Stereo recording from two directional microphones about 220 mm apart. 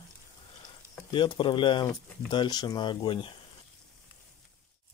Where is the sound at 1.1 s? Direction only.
20° left (ahead or behind).